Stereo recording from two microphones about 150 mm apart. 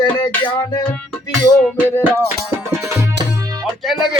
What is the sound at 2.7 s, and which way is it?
Music, 20° right (ahead or behind).